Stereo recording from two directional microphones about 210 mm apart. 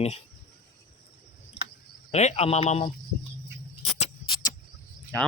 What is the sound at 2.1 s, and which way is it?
Speech, 30° left (ahead or behind).